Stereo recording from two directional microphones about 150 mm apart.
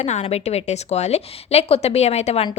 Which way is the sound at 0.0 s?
45° left (ahead or behind).